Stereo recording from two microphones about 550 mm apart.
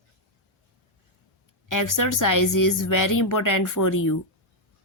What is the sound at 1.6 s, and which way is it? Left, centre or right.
Speech, left.